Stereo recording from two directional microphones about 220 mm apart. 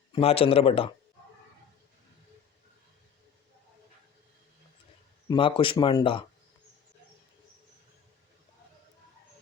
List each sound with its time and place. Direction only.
0.1 s speech: 25° left (ahead or behind)
5.3 s speech: 25° left (ahead or behind)